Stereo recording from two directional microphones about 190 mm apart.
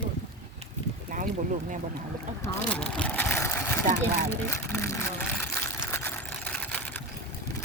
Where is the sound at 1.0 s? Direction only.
40° right (ahead or behind).